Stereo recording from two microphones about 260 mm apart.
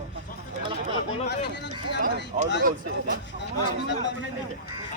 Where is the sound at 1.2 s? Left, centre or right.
Left.